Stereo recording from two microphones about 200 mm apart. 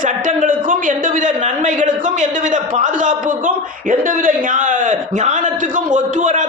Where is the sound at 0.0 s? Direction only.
40° right (ahead or behind).